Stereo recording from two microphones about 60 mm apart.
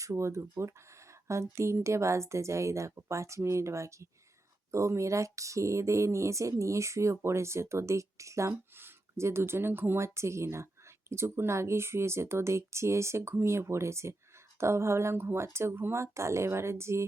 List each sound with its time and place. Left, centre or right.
0.0 s speech: right
8.7 s speech: right